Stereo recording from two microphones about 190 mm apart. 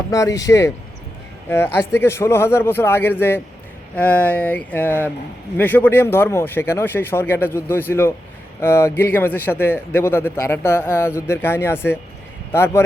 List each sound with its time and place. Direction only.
0.1 s speech: 15° left (ahead or behind)